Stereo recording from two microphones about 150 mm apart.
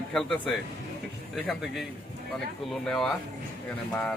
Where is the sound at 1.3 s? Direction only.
Centre (ahead or behind).